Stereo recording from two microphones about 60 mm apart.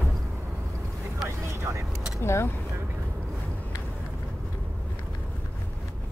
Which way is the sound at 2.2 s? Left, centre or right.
Left.